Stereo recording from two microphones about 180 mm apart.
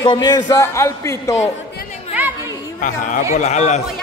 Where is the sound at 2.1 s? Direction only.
10° right (ahead or behind).